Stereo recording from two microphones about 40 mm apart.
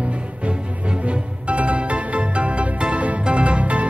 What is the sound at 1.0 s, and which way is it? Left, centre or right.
Music, right.